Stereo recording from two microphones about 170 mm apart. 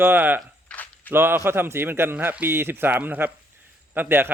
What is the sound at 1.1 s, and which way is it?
Speech, 15° right (ahead or behind).